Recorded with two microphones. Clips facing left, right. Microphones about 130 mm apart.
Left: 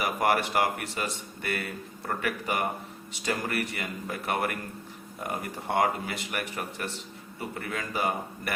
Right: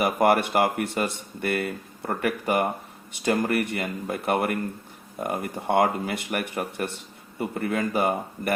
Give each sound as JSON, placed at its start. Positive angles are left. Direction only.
{"t": 0.0, "sound": "speech", "side_deg": -50}